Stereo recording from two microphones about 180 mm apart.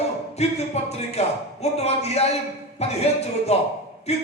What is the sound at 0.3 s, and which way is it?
Speech, 35° left (ahead or behind).